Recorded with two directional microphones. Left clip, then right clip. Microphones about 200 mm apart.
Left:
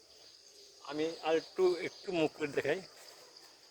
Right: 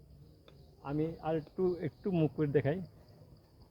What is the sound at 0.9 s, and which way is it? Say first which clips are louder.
Speech: left 2 dB; 25° left (ahead or behind).